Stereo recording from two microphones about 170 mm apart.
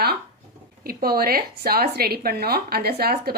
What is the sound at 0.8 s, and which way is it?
A woman's voice, 60° right (ahead or behind).